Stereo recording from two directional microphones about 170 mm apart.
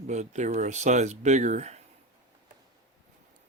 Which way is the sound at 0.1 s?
45° right (ahead or behind).